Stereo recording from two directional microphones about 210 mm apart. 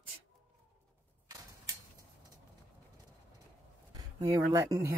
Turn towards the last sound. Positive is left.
turn(degrees=-15)  # may be behind; listen again after turning